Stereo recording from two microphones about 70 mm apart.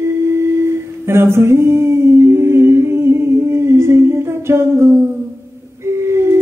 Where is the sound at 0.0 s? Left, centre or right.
Right.